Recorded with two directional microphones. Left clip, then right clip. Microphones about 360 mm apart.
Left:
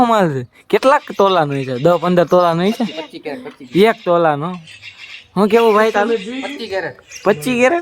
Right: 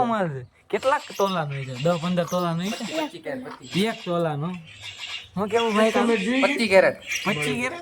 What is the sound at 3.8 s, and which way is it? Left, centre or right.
Speech, centre.